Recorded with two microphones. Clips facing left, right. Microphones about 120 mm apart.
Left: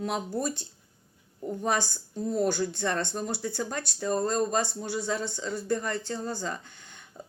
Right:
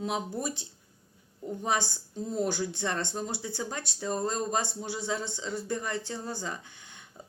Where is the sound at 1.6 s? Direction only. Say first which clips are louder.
Left 1 dB; 20° right (ahead or behind).